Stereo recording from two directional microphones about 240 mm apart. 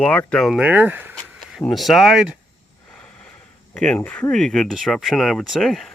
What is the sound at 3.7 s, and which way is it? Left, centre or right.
Speech, centre.